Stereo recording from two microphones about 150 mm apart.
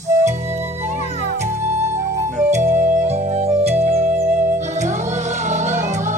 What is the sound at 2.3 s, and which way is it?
Music, 50° right (ahead or behind).